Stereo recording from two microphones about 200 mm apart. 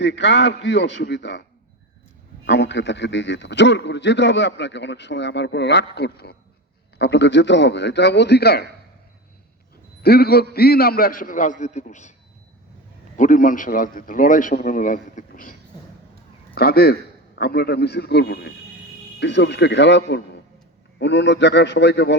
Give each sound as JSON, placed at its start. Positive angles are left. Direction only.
{"t": 0.0, "sound": "a man's voice", "side_deg": 60}
{"t": 2.5, "sound": "a man's voice", "side_deg": 60}
{"t": 10.0, "sound": "a man's voice", "side_deg": 50}
{"t": 13.1, "sound": "a man's voice", "side_deg": 40}
{"t": 16.6, "sound": "a man's voice", "side_deg": 50}